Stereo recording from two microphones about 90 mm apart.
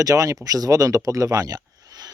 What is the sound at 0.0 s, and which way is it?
Speech, 40° right (ahead or behind).